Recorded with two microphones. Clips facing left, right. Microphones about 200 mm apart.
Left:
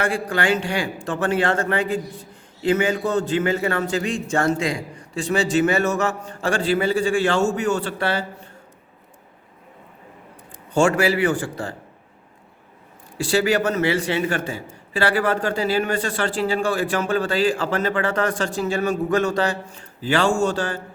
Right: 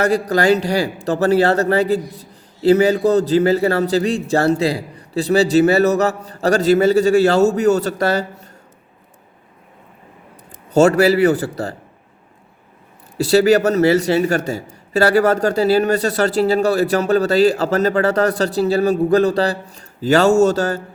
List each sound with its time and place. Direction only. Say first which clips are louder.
0.0 s a man's voice: right 7 dB; 40° right (ahead or behind)
10.7 s a man's voice: right 6 dB; 40° right (ahead or behind)
13.1 s a man's voice: right 7 dB; 40° right (ahead or behind)